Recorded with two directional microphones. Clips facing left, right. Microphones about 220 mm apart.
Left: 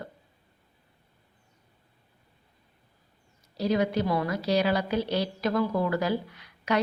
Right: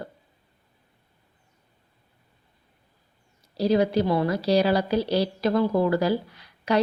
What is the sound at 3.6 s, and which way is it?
A woman's voice, 35° right (ahead or behind).